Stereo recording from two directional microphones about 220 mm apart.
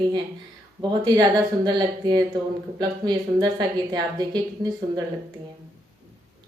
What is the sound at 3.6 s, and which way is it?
A woman's voice, 20° right (ahead or behind).